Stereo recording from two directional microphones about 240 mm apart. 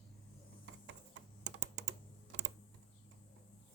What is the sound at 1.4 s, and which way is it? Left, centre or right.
Computer keyboard, right.